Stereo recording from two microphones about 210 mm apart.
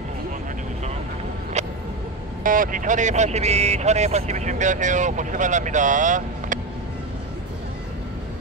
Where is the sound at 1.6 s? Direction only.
35° right (ahead or behind).